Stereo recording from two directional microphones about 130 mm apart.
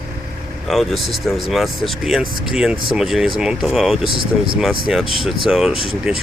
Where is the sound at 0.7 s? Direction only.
Centre (ahead or behind).